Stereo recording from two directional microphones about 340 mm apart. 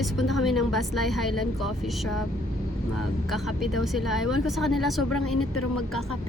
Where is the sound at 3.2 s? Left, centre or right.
Centre.